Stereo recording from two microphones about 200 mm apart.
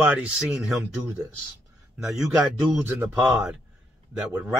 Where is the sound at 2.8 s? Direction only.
10° right (ahead or behind).